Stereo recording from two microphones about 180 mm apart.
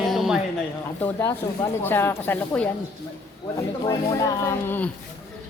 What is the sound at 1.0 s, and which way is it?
Speech, 15° left (ahead or behind).